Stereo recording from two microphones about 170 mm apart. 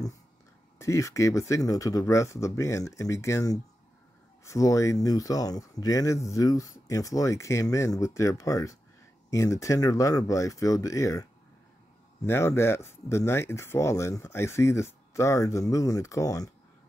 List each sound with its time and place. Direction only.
0.7 s speech: 20° left (ahead or behind)
12.3 s speech: 15° left (ahead or behind)